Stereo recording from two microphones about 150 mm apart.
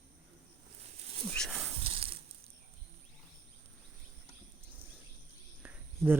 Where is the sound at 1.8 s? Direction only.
40° right (ahead or behind).